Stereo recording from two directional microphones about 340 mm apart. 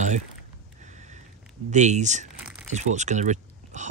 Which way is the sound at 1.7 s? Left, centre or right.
Right.